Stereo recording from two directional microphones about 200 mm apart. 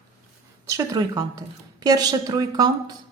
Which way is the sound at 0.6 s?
15° right (ahead or behind).